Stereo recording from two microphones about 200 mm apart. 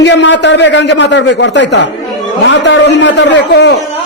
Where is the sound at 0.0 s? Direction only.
65° left (ahead or behind).